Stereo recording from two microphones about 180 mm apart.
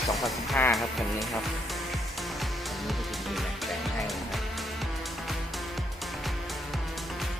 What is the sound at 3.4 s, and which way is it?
Music, centre (ahead or behind).